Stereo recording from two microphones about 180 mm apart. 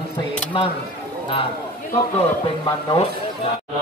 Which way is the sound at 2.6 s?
30° left (ahead or behind).